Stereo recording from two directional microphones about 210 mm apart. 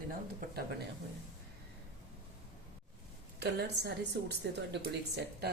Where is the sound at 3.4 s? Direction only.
50° right (ahead or behind).